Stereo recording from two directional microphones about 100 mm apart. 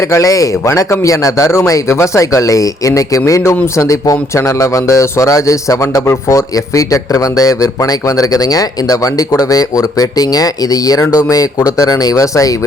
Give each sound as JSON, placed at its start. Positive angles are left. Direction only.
{"t": 0.0, "sound": "speech", "side_deg": 30}